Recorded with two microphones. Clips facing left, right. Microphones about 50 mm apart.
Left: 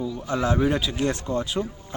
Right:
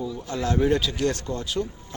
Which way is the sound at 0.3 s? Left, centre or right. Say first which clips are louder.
Even; centre.